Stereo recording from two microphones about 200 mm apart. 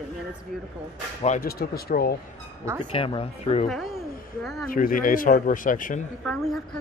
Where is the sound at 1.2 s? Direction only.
40° left (ahead or behind).